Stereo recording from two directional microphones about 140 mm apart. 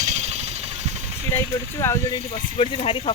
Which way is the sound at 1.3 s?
20° left (ahead or behind).